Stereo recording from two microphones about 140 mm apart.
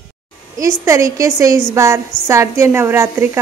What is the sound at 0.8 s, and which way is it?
A woman's voice, 20° right (ahead or behind).